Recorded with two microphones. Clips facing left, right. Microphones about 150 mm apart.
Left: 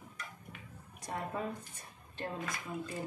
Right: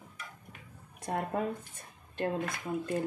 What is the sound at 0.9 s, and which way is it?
A woman's voice, 55° right (ahead or behind).